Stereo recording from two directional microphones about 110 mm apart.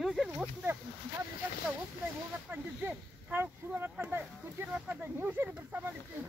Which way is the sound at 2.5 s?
15° right (ahead or behind).